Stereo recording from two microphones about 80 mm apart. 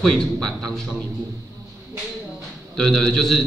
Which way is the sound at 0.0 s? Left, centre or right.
Centre.